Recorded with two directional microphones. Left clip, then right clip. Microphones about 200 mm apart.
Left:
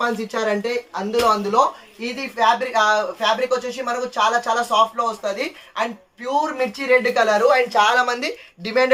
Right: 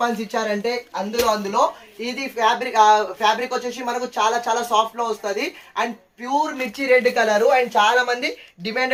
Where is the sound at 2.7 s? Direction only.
25° left (ahead or behind).